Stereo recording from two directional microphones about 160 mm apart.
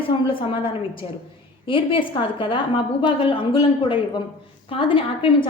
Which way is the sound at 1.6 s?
30° left (ahead or behind).